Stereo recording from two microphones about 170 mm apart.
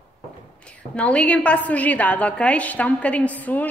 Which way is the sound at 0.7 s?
5° left (ahead or behind).